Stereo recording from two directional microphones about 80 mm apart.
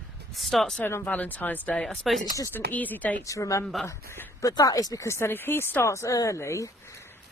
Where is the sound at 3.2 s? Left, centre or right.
Left.